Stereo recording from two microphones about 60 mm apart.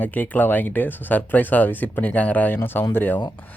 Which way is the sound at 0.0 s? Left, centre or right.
Left.